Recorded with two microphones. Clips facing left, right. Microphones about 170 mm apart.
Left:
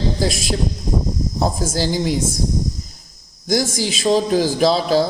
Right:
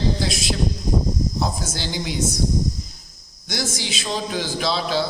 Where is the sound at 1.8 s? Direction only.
40° left (ahead or behind).